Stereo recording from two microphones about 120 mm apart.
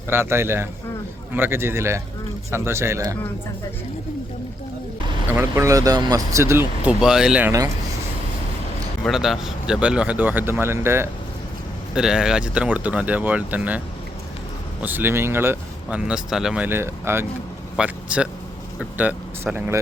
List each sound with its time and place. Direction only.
0.1 s speech: 20° right (ahead or behind)
5.3 s speech: 25° right (ahead or behind)
7.0 s speech: 5° right (ahead or behind)
9.0 s a man's voice: 5° right (ahead or behind); by 11.1 s 20° right (ahead or behind)
11.9 s speech: 5° right (ahead or behind)
16.6 s speech: 20° right (ahead or behind)
17.7 s speech: 10° right (ahead or behind)